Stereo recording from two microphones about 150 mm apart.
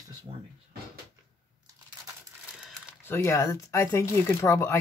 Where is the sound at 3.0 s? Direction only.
15° left (ahead or behind).